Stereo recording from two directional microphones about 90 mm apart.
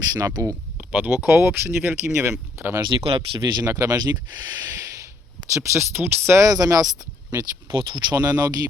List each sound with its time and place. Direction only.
0.1 s speech: 45° right (ahead or behind)
0.8 s a sound: 20° right (ahead or behind)
1.2 s speech: 30° right (ahead or behind)
2.8 s speech: 80° right; by 3.7 s 50° right (ahead or behind)
3.7 s speech: 40° right (ahead or behind)
5.5 s speech: 30° right (ahead or behind); by 8.3 s 50° right (ahead or behind)